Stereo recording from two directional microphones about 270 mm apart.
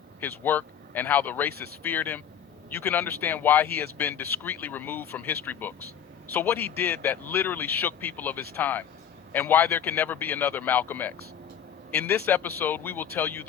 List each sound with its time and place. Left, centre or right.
0.2 s speech: centre